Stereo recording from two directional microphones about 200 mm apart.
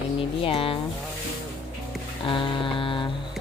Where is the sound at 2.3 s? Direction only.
25° left (ahead or behind).